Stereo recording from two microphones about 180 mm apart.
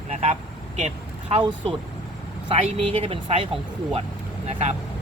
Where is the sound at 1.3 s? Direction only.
30° right (ahead or behind).